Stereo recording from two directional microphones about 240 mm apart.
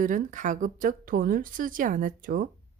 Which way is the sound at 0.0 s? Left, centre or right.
Right.